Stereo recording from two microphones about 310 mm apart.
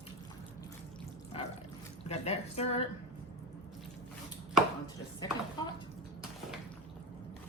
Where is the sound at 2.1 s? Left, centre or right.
Left.